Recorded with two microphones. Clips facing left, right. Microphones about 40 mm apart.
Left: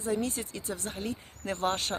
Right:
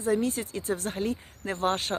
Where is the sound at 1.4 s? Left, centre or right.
Centre.